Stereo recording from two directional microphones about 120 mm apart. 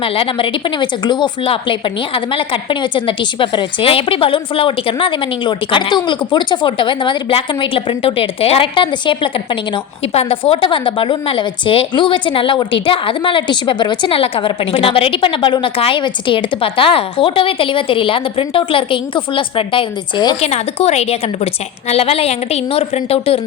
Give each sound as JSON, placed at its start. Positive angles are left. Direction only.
{"t": 0.0, "sound": "speech", "side_deg": 50}
{"t": 20.4, "sound": "a woman's voice", "side_deg": 65}